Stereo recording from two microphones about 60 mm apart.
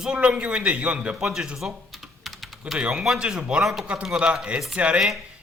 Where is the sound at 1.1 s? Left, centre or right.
Centre.